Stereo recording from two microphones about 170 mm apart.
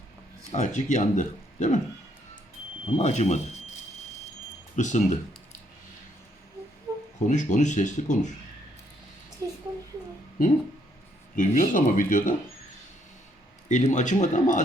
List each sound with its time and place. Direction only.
0.5 s speech: 45° left (ahead or behind)
2.8 s speech: 40° left (ahead or behind)
4.8 s speech: 45° left (ahead or behind)
7.3 s speech: 45° left (ahead or behind)
10.4 s speech: 55° left (ahead or behind)
13.7 s speech: 45° left (ahead or behind)